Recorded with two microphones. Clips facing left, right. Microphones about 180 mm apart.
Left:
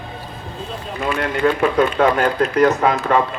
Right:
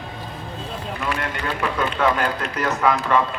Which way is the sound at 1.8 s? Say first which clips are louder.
Left 4 dB; 45° left (ahead or behind).